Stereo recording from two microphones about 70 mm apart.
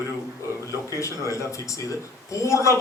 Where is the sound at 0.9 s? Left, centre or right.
Left.